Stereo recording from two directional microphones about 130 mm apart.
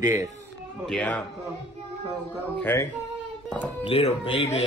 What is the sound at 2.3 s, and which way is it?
Speech, 10° left (ahead or behind).